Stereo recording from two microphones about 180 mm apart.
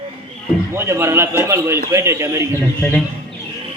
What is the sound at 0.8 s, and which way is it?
A man's voice, 15° right (ahead or behind).